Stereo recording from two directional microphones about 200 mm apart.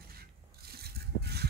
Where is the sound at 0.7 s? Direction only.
50° right (ahead or behind).